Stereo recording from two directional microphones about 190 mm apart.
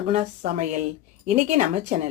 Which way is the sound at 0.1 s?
40° right (ahead or behind).